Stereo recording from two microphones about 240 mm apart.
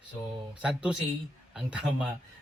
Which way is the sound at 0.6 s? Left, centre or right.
Centre.